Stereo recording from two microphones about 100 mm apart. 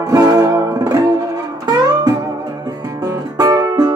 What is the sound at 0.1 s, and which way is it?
Music, 35° right (ahead or behind).